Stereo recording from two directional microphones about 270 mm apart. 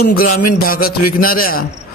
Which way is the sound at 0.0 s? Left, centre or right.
Left.